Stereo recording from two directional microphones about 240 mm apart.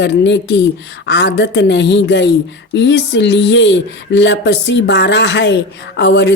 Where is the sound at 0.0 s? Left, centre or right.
Left.